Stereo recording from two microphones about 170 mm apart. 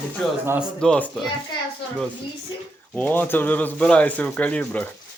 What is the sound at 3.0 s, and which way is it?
Speech, 10° left (ahead or behind).